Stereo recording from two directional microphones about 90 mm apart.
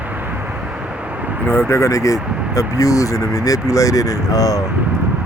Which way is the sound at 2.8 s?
40° left (ahead or behind).